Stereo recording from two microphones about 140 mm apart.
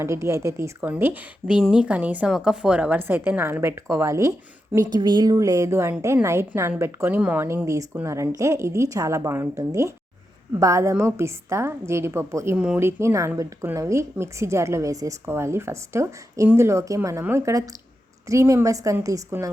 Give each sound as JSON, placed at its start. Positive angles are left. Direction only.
{"t": 0.0, "sound": "a woman's voice", "side_deg": -20}
{"t": 12.5, "sound": "a woman's voice", "side_deg": -5}
{"t": 12.8, "sound": "speech", "side_deg": -20}